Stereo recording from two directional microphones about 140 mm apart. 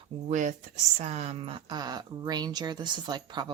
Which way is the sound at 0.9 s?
50° right (ahead or behind).